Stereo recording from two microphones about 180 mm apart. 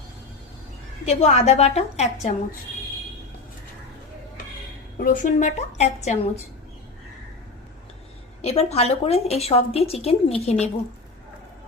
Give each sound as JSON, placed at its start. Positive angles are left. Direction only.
{"t": 1.0, "sound": "a woman's voice", "side_deg": 35}
{"t": 4.9, "sound": "a woman's voice", "side_deg": 50}
{"t": 8.4, "sound": "a woman's voice", "side_deg": 35}